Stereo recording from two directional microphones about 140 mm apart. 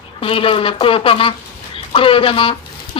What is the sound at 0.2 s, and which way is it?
Speech, 40° left (ahead or behind).